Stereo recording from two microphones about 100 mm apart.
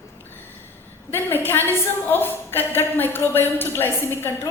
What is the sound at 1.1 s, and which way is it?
A woman's voice, 20° left (ahead or behind).